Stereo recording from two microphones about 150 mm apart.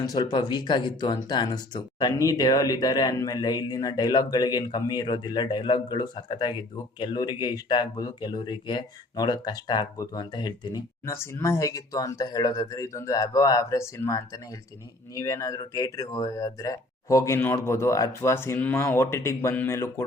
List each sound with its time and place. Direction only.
0.1 s speech: 30° left (ahead or behind)